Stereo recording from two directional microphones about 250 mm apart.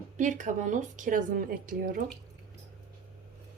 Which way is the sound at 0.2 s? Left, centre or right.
Right.